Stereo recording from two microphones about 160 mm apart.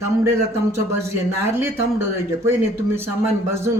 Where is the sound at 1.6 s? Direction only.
15° right (ahead or behind).